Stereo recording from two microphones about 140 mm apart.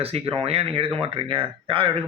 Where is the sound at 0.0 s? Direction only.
45° right (ahead or behind).